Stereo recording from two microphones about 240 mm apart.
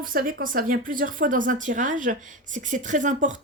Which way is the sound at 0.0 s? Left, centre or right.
Right.